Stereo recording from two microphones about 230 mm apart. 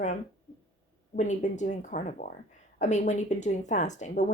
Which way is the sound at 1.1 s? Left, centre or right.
Left.